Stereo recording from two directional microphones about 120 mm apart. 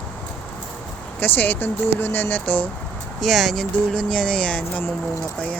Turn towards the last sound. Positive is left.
turn(degrees=10)  # may be behind; listen again after turning